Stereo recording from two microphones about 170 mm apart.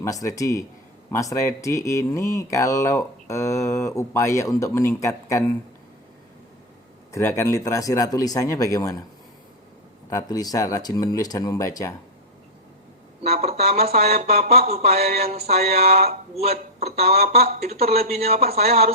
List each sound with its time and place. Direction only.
0.0 s speech: 20° left (ahead or behind)
7.1 s speech: 15° left (ahead or behind)
10.1 s speech: 20° left (ahead or behind)
13.2 s speech: 40° right (ahead or behind)
15.7 s speech: 65° right (ahead or behind)
16.3 s speech: 40° right (ahead or behind)
17.3 s speech: 60° right (ahead or behind)
17.6 s speech: 40° right (ahead or behind)